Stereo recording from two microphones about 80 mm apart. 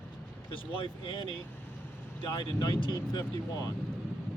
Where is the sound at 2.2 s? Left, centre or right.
Left.